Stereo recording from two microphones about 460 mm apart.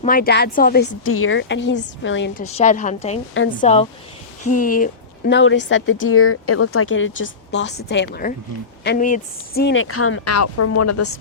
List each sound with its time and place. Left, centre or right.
0.0 s speech: centre
3.3 s speech: left